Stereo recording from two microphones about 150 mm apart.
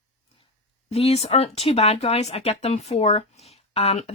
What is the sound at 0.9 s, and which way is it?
Speech, 45° left (ahead or behind).